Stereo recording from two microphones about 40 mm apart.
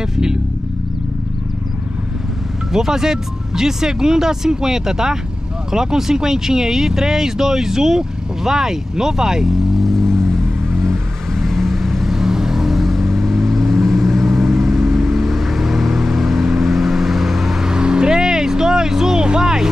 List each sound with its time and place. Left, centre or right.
2.7 s speech: centre
9.8 s vehicle: centre
12.2 s vehicle: centre
17.6 s vehicle: right